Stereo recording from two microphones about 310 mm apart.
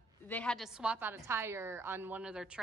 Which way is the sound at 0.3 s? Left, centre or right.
Centre.